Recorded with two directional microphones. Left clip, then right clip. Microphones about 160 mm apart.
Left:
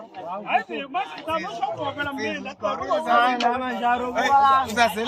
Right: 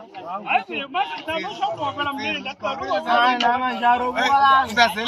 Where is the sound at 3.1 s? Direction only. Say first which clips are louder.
Right 2 dB; 65° left (ahead or behind).